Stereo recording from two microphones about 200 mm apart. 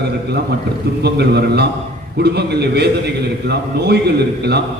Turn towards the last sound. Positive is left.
turn(degrees=-55)  # may be behind; listen again after turning